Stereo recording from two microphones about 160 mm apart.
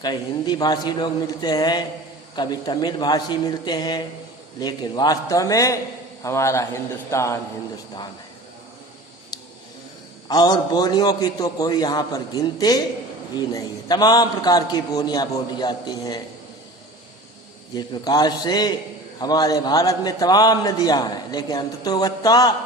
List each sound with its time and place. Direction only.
0.0 s a man's voice: 25° left (ahead or behind)
9.3 s a sound: 25° left (ahead or behind)
10.2 s a man's voice: 25° left (ahead or behind)
17.7 s a man's voice: 25° left (ahead or behind)